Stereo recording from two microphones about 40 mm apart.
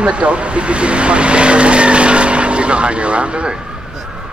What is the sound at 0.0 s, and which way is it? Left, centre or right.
Speech, right.